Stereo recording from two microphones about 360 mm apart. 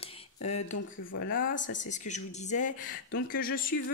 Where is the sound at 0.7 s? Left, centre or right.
Left.